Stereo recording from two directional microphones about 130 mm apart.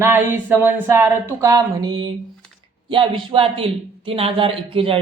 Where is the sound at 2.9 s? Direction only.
40° right (ahead or behind).